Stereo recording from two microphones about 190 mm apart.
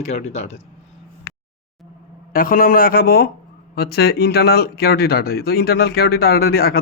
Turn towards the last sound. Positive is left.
turn(degrees=50)  # may be behind; listen again after turning